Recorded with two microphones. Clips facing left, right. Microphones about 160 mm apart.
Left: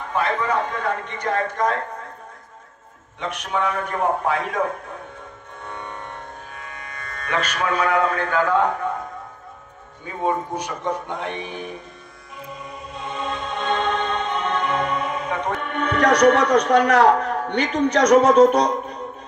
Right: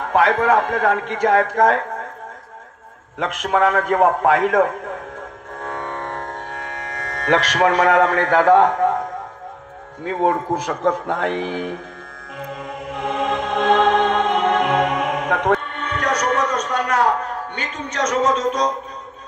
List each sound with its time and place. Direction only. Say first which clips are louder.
0.0 s a man's voice: right 6 dB; 90° right
3.2 s a man's voice: right 6 dB; 90° right
5.6 s music: right 6 dB; 90° right
10.0 s a man's voice: right 5 dB; 90° right
12.4 s music: right 6 dB; 90° right
15.6 s a man's voice: left 5 dB; 60° left (ahead or behind)